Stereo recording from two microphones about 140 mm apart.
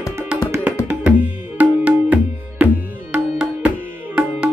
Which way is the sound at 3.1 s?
10° right (ahead or behind).